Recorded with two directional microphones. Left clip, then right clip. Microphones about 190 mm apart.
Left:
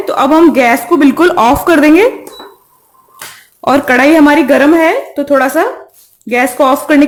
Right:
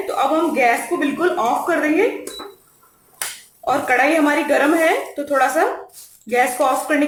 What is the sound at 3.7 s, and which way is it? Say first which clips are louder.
Speech: left 8 dB; 50° left (ahead or behind).